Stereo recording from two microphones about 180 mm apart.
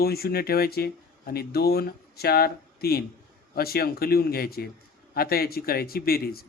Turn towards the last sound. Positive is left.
turn(degrees=55)  # may be behind; listen again after turning